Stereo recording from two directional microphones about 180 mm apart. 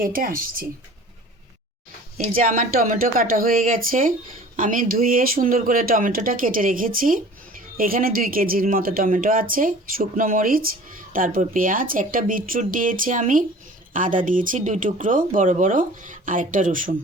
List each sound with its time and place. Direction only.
0.0 s speech: 50° right (ahead or behind)
2.4 s speech: 50° right (ahead or behind)